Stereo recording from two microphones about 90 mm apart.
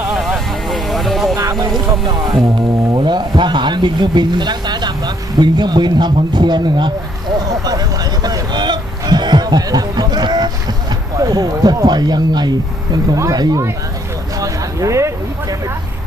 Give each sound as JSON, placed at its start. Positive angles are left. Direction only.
{"t": 0.1, "sound": "vehicle", "side_deg": 0}
{"t": 1.4, "sound": "music", "side_deg": -45}
{"t": 2.9, "sound": "a sound", "side_deg": -55}
{"t": 13.1, "sound": "speech", "side_deg": -45}
{"t": 14.3, "sound": "vehicle", "side_deg": -35}